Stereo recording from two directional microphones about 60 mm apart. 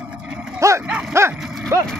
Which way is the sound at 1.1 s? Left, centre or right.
Right.